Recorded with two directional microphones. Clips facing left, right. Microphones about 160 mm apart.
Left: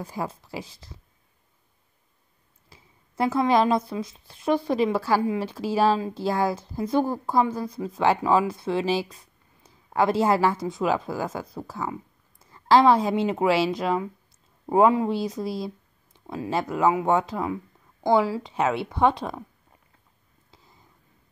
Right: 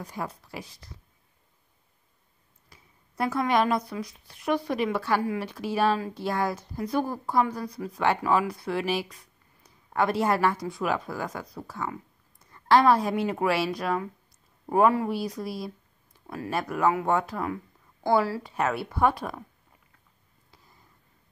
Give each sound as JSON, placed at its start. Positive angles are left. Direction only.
{"t": 0.0, "sound": "a woman's voice", "side_deg": 25}
{"t": 2.7, "sound": "a woman's voice", "side_deg": 25}